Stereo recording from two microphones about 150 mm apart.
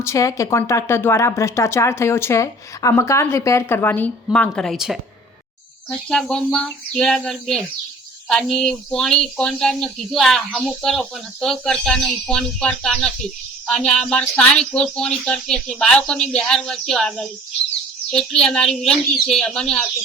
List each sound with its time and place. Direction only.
0.0 s speech: 20° left (ahead or behind)